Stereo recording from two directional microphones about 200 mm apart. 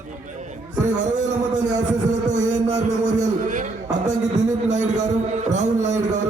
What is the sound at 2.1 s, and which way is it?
A man's voice, 40° right (ahead or behind).